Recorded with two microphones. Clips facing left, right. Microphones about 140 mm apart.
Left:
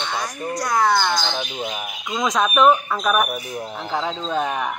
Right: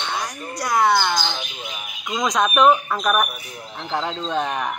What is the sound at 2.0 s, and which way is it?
Speech, centre (ahead or behind).